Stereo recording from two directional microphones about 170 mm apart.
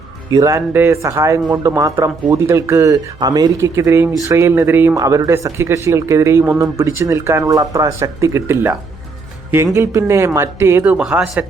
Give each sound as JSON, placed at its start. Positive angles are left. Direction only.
{"t": 0.3, "sound": "speech", "side_deg": -20}
{"t": 9.7, "sound": "speech", "side_deg": -15}